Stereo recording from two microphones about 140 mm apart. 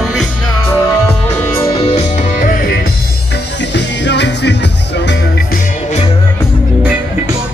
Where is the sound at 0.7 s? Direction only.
15° left (ahead or behind).